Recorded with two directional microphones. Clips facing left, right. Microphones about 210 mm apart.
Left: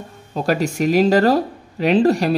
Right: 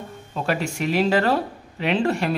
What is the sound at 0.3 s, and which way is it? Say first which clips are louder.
Speech: left 5 dB; 40° left (ahead or behind).